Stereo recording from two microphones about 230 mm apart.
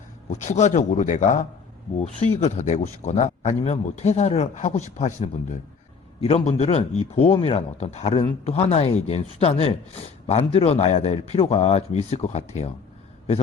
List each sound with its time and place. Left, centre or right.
0.3 s a man's voice: left